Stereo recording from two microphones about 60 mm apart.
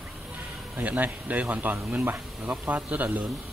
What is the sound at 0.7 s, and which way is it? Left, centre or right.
Speech, right.